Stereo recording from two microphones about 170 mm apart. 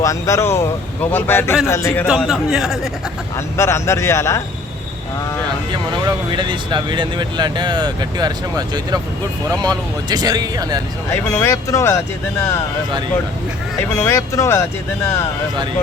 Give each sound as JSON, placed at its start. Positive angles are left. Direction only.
{"t": 0.0, "sound": "a man's voice", "side_deg": 15}
{"t": 2.0, "sound": "speech", "side_deg": 0}
{"t": 3.6, "sound": "a man's voice", "side_deg": 15}
{"t": 6.1, "sound": "speech", "side_deg": -25}
{"t": 11.1, "sound": "a man's voice", "side_deg": 15}
{"t": 14.0, "sound": "a man's voice", "side_deg": 15}